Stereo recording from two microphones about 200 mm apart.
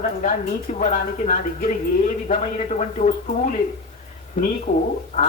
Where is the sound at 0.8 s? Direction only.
40° left (ahead or behind).